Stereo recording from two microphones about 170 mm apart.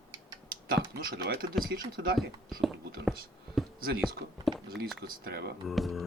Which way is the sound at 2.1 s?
Centre (ahead or behind).